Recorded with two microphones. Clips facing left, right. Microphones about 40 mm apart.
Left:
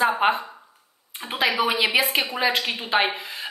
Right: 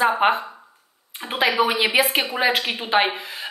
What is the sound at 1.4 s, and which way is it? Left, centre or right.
A woman's voice, centre.